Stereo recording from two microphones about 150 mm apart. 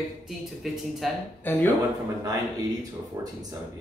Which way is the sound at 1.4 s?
10° left (ahead or behind).